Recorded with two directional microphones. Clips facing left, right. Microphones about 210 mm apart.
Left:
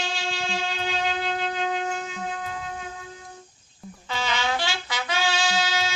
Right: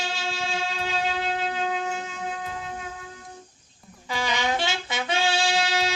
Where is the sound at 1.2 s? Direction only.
5° right (ahead or behind).